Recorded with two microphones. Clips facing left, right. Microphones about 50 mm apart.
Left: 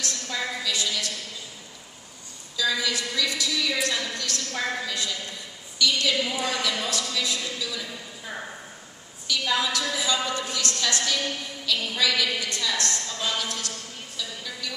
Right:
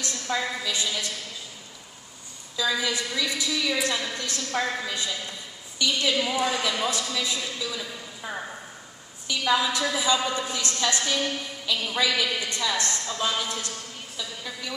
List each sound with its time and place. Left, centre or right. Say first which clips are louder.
0.0 s a woman's voice: right 2 dB; right
2.5 s a woman's voice: even; centre